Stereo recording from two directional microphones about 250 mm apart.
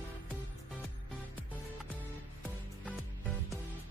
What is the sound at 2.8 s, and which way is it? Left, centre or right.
Music, centre.